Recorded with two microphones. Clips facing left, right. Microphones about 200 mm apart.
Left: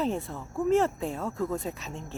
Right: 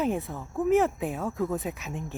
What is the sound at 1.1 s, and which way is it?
Speech, centre (ahead or behind).